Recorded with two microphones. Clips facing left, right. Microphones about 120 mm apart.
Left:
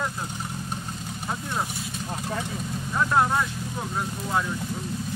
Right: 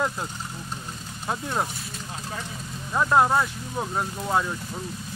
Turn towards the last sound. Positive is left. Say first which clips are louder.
# right 2 dB
turn(degrees=-25)  # may be behind; listen again after turning